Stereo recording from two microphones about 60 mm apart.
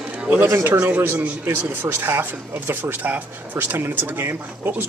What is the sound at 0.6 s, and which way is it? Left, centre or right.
Speech, right.